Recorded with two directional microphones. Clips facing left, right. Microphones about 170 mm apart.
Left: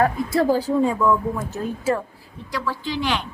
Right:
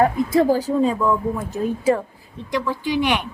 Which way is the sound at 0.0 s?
15° right (ahead or behind).